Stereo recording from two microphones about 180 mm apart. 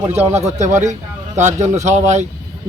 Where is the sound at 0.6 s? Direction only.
40° right (ahead or behind).